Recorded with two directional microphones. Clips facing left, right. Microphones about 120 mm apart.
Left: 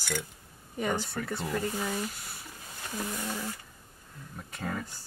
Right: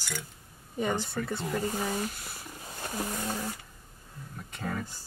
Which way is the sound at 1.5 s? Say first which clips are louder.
Right 1 dB; 20° right (ahead or behind).